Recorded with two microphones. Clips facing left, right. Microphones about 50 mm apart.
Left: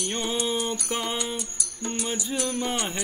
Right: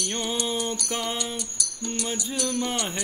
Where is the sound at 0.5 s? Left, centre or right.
Centre.